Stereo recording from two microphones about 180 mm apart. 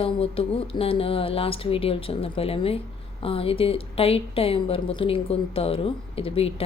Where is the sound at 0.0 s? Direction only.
30° left (ahead or behind).